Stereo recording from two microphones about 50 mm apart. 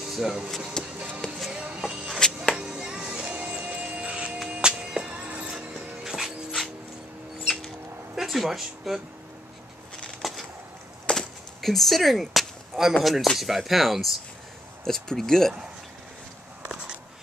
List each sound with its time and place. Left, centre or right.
0.1 s speech: centre
0.8 s music: centre
1.8 s vehicle: centre
2.1 s music: centre
2.5 s music: centre
5.2 s music: right
5.5 s dog: centre
8.2 s speech: centre
10.2 s a sound: centre
11.1 s a sound: centre
11.6 s speech: centre